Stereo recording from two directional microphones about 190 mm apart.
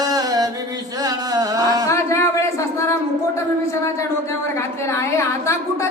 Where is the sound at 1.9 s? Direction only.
15° left (ahead or behind).